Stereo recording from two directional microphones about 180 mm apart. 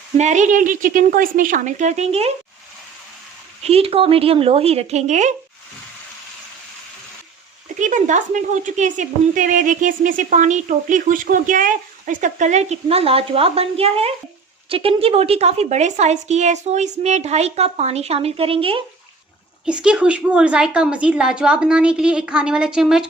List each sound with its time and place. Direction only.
0.2 s a woman's voice: 40° right (ahead or behind)
3.6 s a woman's voice: 35° right (ahead or behind)
7.8 s a woman's voice: 45° right (ahead or behind)
19.6 s a woman's voice: 5° right (ahead or behind)